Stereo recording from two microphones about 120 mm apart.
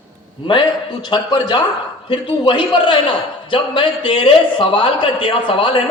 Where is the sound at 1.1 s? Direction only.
35° left (ahead or behind).